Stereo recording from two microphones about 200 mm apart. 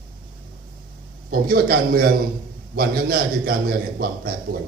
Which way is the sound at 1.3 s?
50° right (ahead or behind).